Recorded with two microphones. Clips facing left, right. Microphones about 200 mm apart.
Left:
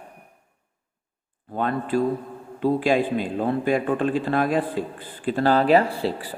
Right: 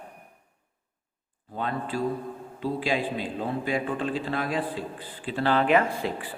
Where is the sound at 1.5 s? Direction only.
55° left (ahead or behind).